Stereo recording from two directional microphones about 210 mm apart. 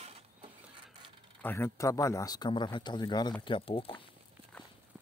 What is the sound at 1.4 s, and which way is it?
Speech, 10° left (ahead or behind).